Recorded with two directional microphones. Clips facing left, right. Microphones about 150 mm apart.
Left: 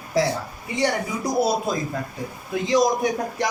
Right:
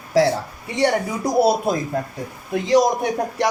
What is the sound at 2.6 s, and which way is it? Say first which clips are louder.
Speech: right 3 dB; 65° right (ahead or behind).